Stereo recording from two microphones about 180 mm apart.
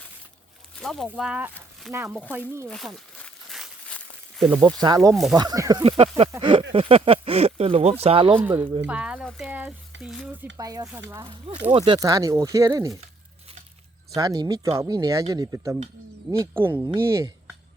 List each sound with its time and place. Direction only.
0.8 s speech: centre (ahead or behind)
2.3 s speech: 10° right (ahead or behind)
2.6 s crumpling: 5° left (ahead or behind)
4.4 s speech: 15° right (ahead or behind)
5.1 s speech: centre (ahead or behind)
5.4 s speech: 20° right (ahead or behind)
8.4 s speech: 10° right (ahead or behind)
10.6 s speech: 20° right (ahead or behind)
14.2 s speech: 20° right (ahead or behind)